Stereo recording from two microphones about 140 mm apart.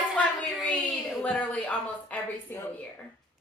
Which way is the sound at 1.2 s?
10° left (ahead or behind).